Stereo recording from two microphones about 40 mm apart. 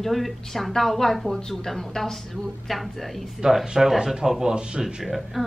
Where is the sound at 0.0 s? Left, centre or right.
Centre.